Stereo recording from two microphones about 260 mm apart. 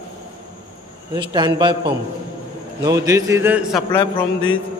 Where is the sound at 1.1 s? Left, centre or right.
Centre.